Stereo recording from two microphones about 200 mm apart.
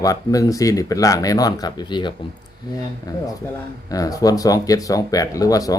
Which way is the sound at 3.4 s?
15° left (ahead or behind).